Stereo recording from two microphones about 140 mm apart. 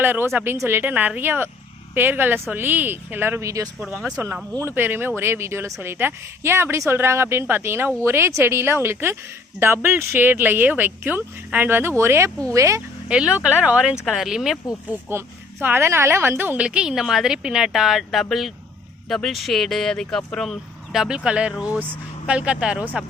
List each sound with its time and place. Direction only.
0.0 s a woman's voice: 15° right (ahead or behind)
3.8 s speech: centre (ahead or behind)
4.6 s a woman's voice: 15° right (ahead or behind)
13.1 s a woman's voice: 5° right (ahead or behind)
15.1 s a woman's voice: 15° right (ahead or behind)